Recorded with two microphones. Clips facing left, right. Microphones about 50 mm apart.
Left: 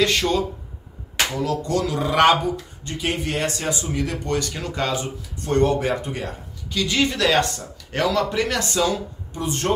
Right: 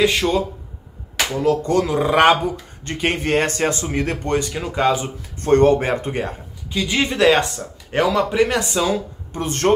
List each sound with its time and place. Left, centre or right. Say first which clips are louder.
0.0 s speech: right 3 dB; centre
1.4 s speech: right 8 dB; right
2.8 s speech: right 6 dB; right
4.4 s speech: right 5 dB; centre
5.4 s speech: right 5 dB; right
6.7 s speech: right 1 dB; right
9.3 s speech: right 4 dB; right